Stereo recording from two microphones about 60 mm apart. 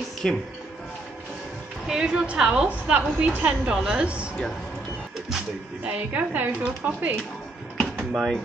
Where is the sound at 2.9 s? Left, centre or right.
Right.